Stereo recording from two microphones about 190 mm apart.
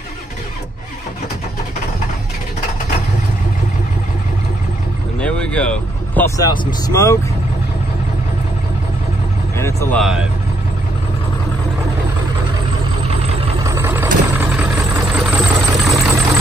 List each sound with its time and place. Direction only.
5.2 s vehicle: 5° left (ahead or behind)
6.1 s speech: 15° left (ahead or behind)
9.6 s speech: 15° left (ahead or behind)
9.9 s speech: centre (ahead or behind)
13.7 s vehicle: 10° right (ahead or behind)